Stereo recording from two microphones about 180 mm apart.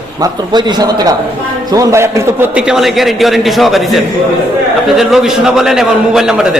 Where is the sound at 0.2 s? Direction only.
25° right (ahead or behind).